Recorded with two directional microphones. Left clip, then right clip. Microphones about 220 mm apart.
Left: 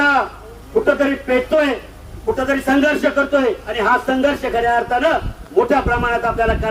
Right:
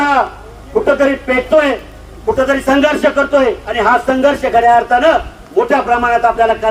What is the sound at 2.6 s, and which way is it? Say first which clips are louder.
Speech: right 2 dB; 45° left (ahead or behind).